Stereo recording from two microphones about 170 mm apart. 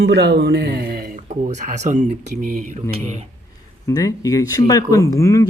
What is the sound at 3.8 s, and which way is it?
Speech, 20° left (ahead or behind).